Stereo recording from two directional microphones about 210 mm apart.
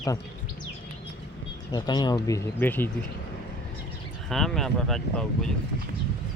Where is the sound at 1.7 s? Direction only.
20° left (ahead or behind).